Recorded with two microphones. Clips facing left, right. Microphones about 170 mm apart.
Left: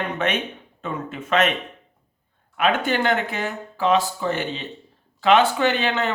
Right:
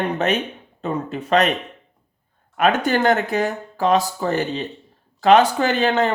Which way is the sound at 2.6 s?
45° right (ahead or behind).